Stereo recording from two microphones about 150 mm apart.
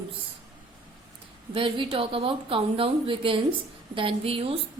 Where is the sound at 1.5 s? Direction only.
35° right (ahead or behind).